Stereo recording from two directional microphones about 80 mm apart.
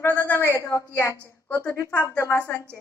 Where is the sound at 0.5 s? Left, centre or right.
Left.